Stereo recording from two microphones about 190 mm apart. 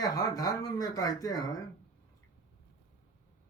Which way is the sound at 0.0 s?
20° left (ahead or behind).